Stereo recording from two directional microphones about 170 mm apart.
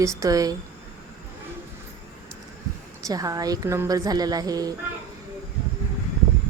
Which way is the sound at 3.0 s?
20° right (ahead or behind).